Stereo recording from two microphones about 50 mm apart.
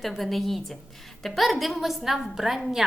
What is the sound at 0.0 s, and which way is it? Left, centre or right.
A woman's voice, centre.